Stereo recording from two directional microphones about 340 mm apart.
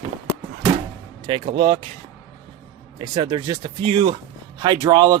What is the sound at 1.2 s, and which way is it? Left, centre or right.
Speech, centre.